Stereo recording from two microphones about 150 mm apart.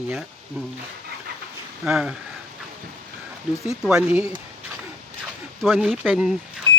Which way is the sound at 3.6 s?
5° right (ahead or behind).